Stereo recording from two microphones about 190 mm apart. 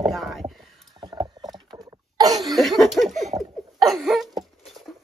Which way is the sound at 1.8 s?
20° right (ahead or behind).